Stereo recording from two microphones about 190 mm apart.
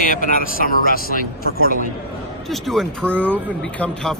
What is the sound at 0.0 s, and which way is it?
Speech, 45° left (ahead or behind).